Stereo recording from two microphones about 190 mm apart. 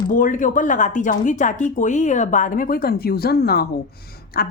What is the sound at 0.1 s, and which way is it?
A woman's voice, 45° left (ahead or behind).